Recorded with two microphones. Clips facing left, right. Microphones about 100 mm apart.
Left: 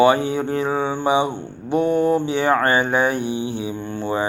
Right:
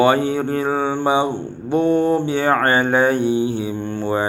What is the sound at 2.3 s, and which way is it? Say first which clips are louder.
Speech: right 1 dB; 45° right (ahead or behind).